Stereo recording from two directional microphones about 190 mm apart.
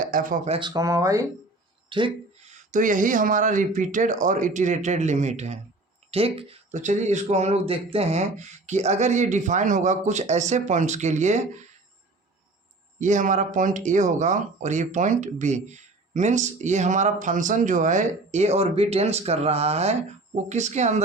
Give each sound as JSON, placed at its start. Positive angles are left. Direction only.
{"t": 0.1, "sound": "speech", "side_deg": -45}
{"t": 0.7, "sound": "speech", "side_deg": -15}
{"t": 2.7, "sound": "speech", "side_deg": -45}
{"t": 13.0, "sound": "speech", "side_deg": -40}